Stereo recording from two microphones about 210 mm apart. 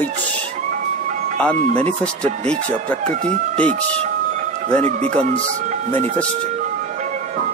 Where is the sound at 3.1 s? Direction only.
35° right (ahead or behind).